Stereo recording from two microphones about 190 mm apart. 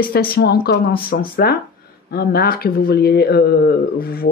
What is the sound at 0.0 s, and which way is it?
Speech, 50° left (ahead or behind).